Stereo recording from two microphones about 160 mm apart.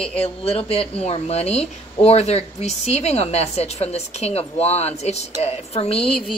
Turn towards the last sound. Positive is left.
turn(degrees=35)  # may be behind; listen again after turning